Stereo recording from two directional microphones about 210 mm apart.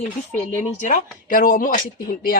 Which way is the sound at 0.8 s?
40° left (ahead or behind).